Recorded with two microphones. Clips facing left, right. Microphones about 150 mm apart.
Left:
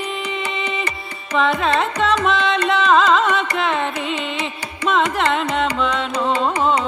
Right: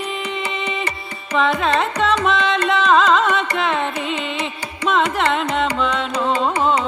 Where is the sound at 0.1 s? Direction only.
Centre (ahead or behind).